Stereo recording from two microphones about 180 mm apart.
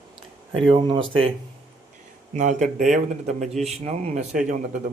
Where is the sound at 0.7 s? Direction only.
25° right (ahead or behind).